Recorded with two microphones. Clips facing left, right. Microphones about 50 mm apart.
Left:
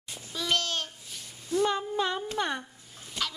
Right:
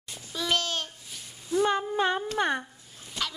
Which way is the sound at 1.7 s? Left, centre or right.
Right.